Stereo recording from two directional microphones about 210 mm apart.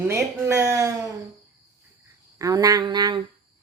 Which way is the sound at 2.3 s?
15° right (ahead or behind).